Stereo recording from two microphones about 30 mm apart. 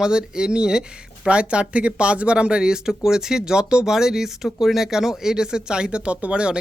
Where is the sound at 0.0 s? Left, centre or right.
Right.